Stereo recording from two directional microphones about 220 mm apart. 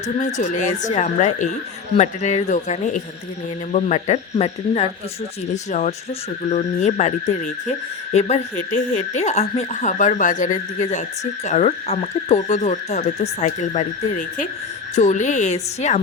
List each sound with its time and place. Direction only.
0.2 s speech: 35° left (ahead or behind)
6.5 s speech: 30° left (ahead or behind)